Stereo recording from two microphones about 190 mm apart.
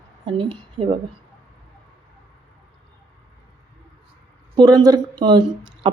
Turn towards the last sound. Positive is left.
turn(degrees=-25)  # may be behind; listen again after turning